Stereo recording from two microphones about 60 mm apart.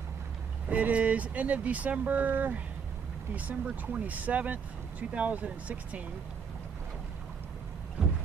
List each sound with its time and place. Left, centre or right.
0.7 s speech: right